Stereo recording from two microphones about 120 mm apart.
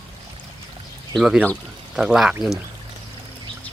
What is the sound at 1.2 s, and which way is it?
Speech, 5° right (ahead or behind).